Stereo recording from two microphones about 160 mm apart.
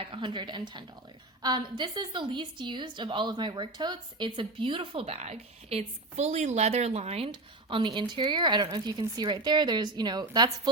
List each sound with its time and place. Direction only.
0.0 s a woman's voice: 30° right (ahead or behind)